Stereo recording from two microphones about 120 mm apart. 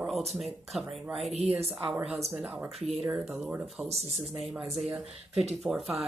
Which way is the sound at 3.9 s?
60° right (ahead or behind).